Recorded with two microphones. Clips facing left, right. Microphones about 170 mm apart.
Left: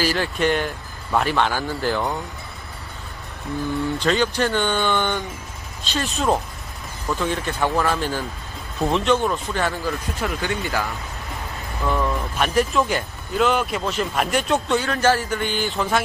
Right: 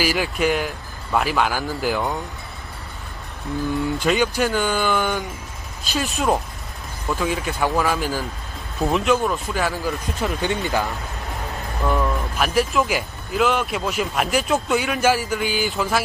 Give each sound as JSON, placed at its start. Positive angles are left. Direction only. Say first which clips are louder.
{"t": 0.0, "sound": "speech", "louder": "even", "side_deg": -10}
{"t": 4.0, "sound": "speech", "louder": "even", "side_deg": -10}
{"t": 9.8, "sound": "speech", "louder": "right 1 dB", "side_deg": -20}
{"t": 11.8, "sound": "speech", "louder": "right 1 dB", "side_deg": 0}